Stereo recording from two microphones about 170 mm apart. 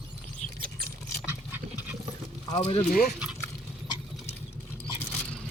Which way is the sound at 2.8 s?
60° left (ahead or behind).